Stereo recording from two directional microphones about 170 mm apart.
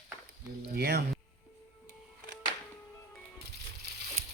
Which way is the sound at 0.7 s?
70° right (ahead or behind).